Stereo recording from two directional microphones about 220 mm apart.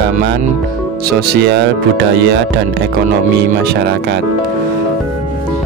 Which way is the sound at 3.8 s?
50° right (ahead or behind).